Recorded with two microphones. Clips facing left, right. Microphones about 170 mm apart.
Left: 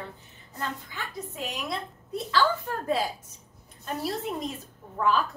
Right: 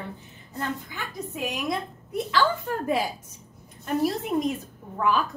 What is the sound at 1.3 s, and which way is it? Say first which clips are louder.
A woman's voice: right 5 dB; 15° right (ahead or behind).